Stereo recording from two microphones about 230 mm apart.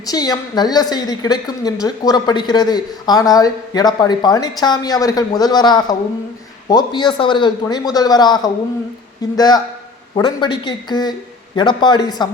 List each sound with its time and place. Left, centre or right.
0.0 s a woman's voice: centre